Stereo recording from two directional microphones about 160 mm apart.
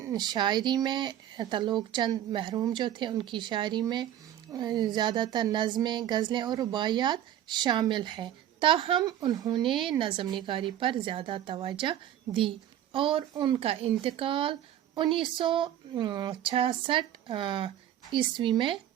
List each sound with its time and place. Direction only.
0.0 s speech: 25° right (ahead or behind)